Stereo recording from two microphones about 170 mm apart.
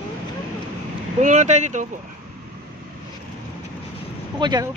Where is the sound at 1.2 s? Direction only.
45° right (ahead or behind).